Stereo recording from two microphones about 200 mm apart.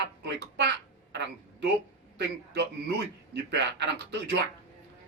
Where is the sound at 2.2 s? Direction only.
55° right (ahead or behind).